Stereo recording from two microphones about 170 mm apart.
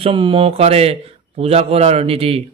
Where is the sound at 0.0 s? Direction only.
30° right (ahead or behind).